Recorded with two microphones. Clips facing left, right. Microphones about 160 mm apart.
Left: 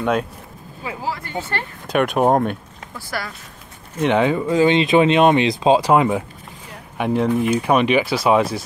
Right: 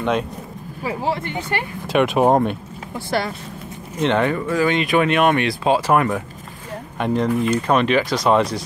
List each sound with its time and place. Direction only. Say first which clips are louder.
0.0 s speech: left 1 dB; 5° left (ahead or behind)
0.8 s speech: right 4 dB; 25° right (ahead or behind)
1.9 s speech: right 1 dB; centre (ahead or behind)
2.9 s speech: right 7 dB; 25° right (ahead or behind)
4.0 s speech: left 2 dB; 15° left (ahead or behind)